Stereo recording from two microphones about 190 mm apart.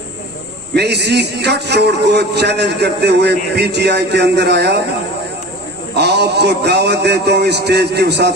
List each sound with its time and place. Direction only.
0.8 s a man's voice: 60° right (ahead or behind)
5.9 s a man's voice: 60° right (ahead or behind)